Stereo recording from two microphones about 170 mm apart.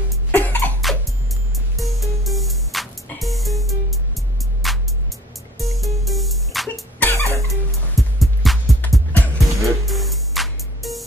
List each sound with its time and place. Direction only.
0.3 s cough: 10° left (ahead or behind)
1.8 s music: centre (ahead or behind)